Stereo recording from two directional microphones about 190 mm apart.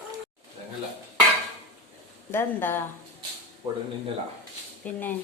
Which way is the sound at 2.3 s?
10° left (ahead or behind).